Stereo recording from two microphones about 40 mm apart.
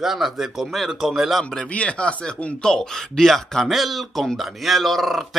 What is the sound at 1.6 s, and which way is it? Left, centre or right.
Speech, left.